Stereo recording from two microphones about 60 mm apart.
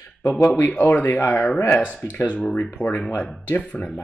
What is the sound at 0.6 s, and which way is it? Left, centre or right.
Speech, left.